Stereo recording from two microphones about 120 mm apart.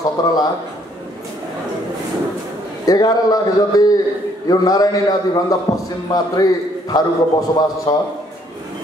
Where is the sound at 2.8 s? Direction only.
30° left (ahead or behind).